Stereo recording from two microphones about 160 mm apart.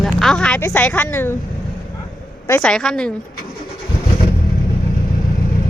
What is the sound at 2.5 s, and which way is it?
Speech, 5° left (ahead or behind).